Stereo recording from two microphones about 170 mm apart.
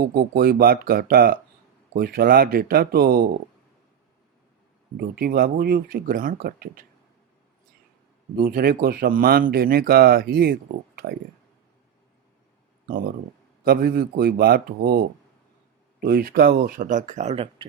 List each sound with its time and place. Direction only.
0.0 s speech: 65° right (ahead or behind)
4.9 s speech: 65° right (ahead or behind)
8.4 s speech: 60° right (ahead or behind)
12.9 s speech: 55° right (ahead or behind)
16.0 s speech: 60° right (ahead or behind); by 17.7 s 35° right (ahead or behind)